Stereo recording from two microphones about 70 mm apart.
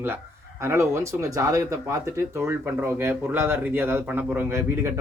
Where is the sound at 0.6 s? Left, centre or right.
Right.